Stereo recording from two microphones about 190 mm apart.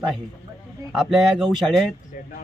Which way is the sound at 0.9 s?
5° right (ahead or behind).